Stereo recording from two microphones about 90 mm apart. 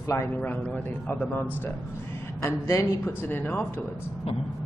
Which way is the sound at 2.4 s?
35° left (ahead or behind).